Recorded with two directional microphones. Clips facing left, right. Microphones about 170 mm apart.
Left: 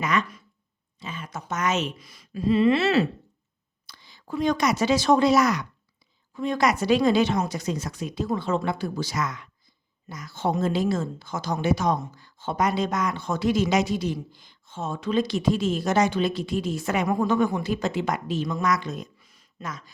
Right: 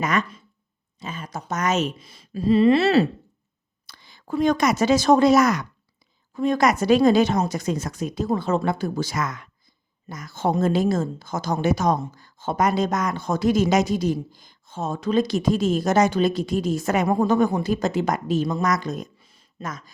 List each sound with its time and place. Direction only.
0.0 s speech: 45° right (ahead or behind)
0.9 s a sound: 45° right (ahead or behind)
2.0 s a woman's voice: 25° right (ahead or behind)
3.8 s a woman's voice: 50° right (ahead or behind)
19.2 s a sound: 30° right (ahead or behind)
19.6 s speech: 45° right (ahead or behind)